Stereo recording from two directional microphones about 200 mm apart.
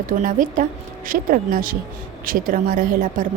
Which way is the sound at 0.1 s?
40° right (ahead or behind).